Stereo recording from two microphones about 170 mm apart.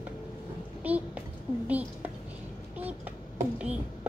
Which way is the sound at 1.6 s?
10° right (ahead or behind).